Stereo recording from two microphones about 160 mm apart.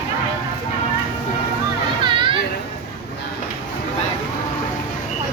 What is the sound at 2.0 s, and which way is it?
Children playing, 30° right (ahead or behind).